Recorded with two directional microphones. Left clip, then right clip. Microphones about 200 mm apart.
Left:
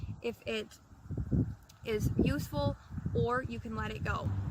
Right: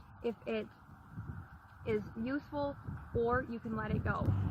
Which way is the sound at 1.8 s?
35° left (ahead or behind).